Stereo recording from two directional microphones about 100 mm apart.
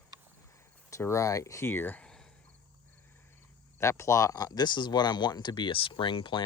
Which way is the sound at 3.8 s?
30° left (ahead or behind).